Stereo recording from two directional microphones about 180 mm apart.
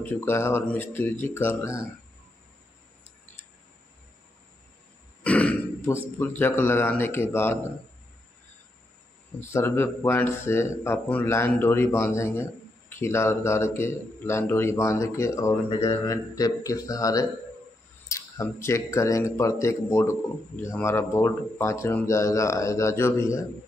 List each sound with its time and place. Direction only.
0.0 s speech: 15° left (ahead or behind)
5.2 s throat clearing: 5° left (ahead or behind)
6.1 s speech: 10° left (ahead or behind)
9.4 s speech: 15° left (ahead or behind)
15.7 s speech: 30° left (ahead or behind)
16.1 s speech: 20° left (ahead or behind)